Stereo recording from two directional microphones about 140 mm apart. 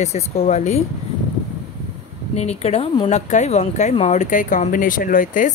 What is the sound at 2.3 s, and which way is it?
Speech, 50° left (ahead or behind).